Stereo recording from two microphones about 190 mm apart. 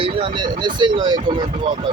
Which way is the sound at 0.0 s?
25° right (ahead or behind).